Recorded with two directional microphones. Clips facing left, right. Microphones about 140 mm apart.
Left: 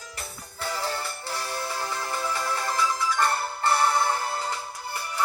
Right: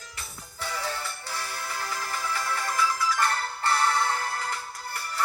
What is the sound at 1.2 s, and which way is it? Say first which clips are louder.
Music: left 4 dB; 30° left (ahead or behind).